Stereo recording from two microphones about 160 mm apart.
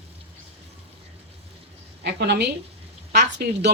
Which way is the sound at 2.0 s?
90° right.